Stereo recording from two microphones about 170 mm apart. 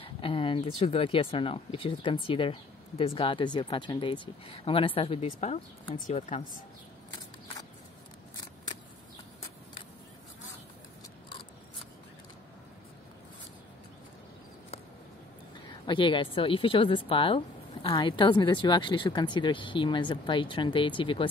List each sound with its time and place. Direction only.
0.0 s speech: 30° left (ahead or behind)
15.5 s a woman's voice: 30° left (ahead or behind)